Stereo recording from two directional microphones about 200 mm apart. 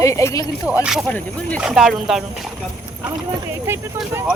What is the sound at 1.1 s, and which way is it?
Speech, 5° left (ahead or behind).